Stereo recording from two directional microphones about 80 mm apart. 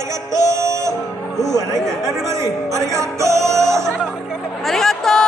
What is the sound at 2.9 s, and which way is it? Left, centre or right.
Music, right.